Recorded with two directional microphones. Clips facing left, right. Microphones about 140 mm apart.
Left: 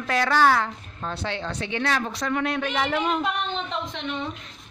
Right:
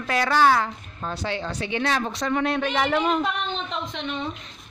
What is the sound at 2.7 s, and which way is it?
Speech, 55° right (ahead or behind).